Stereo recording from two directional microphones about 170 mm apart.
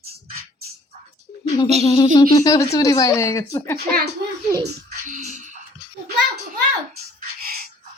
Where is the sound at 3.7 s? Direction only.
70° right (ahead or behind).